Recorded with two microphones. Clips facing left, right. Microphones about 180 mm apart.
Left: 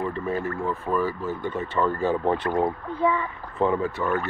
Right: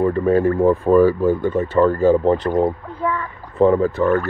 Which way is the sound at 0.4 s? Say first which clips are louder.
Right 13 dB; 55° right (ahead or behind).